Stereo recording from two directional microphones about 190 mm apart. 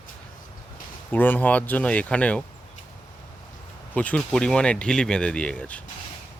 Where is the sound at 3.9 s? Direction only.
10° left (ahead or behind).